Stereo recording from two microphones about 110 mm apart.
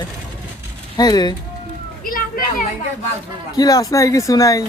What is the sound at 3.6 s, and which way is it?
Speech, 35° left (ahead or behind).